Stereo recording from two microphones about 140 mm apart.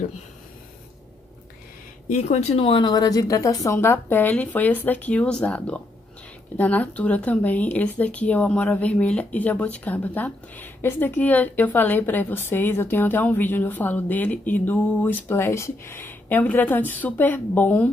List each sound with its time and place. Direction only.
2.0 s speech: 55° left (ahead or behind); by 17.9 s 10° left (ahead or behind)